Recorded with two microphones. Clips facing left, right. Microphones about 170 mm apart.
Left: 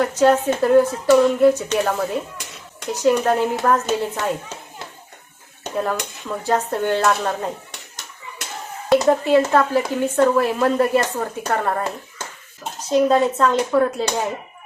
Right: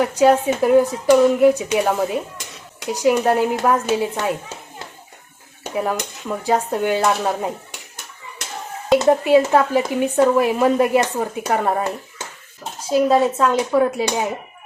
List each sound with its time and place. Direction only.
0.0 s speech: 10° right (ahead or behind)
5.7 s speech: 15° right (ahead or behind)
7.2 s a sound: 5° right (ahead or behind)
9.0 s speech: 15° right (ahead or behind)
12.9 s speech: 5° right (ahead or behind)